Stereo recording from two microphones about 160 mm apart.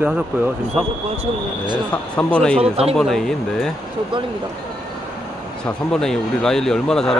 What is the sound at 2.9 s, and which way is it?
Speech, 5° left (ahead or behind).